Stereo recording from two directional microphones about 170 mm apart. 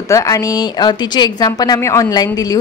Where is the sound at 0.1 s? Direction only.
20° left (ahead or behind).